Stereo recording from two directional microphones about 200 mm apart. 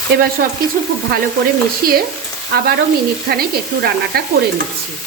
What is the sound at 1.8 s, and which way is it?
Speech, 45° right (ahead or behind).